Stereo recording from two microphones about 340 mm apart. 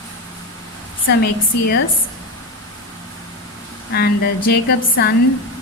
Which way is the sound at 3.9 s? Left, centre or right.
Left.